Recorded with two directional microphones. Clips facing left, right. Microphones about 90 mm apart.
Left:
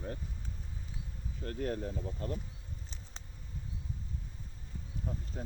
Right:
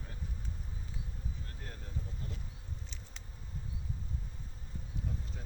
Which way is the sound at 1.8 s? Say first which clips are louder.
Left 8 dB; 45° left (ahead or behind).